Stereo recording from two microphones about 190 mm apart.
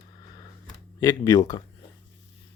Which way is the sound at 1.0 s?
15° left (ahead or behind).